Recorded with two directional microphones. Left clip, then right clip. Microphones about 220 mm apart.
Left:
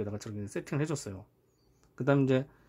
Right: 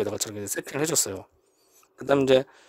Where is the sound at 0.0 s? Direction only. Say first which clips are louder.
Right 10 dB; 40° right (ahead or behind).